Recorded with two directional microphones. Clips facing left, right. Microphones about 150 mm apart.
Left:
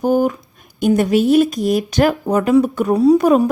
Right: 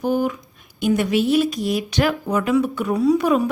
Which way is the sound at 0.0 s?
45° left (ahead or behind).